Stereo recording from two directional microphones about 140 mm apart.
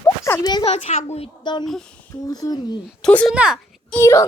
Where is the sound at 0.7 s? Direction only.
50° left (ahead or behind).